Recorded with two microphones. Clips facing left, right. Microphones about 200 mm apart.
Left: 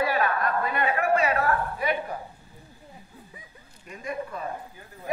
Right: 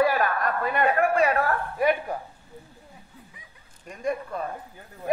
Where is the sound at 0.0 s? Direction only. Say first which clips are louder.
Right 2 dB; 45° right (ahead or behind).